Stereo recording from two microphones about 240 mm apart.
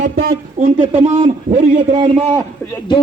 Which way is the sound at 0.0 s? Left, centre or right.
Right.